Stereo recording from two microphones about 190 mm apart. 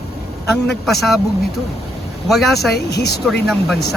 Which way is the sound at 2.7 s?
60° left (ahead or behind).